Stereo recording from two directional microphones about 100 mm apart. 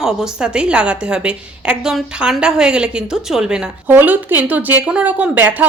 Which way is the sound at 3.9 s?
20° right (ahead or behind).